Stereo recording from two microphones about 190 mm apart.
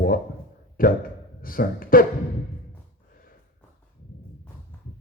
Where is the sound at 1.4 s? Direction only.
50° left (ahead or behind).